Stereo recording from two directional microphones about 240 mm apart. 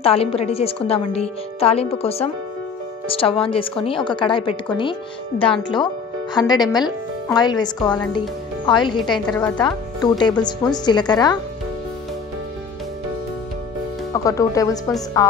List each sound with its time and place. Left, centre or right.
0.0 s a woman's voice: left
14.1 s a woman's voice: centre